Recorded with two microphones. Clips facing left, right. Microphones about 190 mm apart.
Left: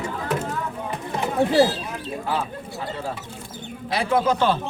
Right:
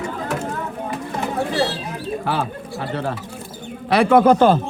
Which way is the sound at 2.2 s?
75° right (ahead or behind).